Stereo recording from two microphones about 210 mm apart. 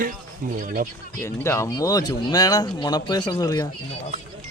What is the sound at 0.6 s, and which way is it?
Speech, 40° right (ahead or behind).